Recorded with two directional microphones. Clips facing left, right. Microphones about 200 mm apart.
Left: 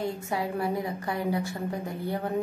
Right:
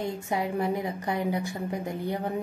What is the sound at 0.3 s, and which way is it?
A woman's voice, 20° right (ahead or behind).